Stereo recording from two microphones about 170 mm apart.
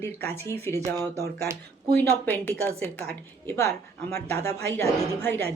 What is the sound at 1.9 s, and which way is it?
Speech, 10° left (ahead or behind).